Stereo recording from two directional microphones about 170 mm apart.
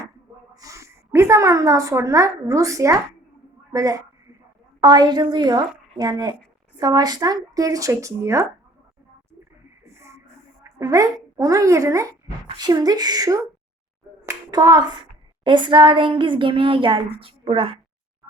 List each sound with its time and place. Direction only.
0.6 s a woman's voice: 20° right (ahead or behind)
9.8 s a sound: 15° right (ahead or behind)
12.5 s a child's voice: 25° right (ahead or behind)
14.3 s finger snapping: 20° right (ahead or behind)
15.4 s a child's voice: 30° right (ahead or behind)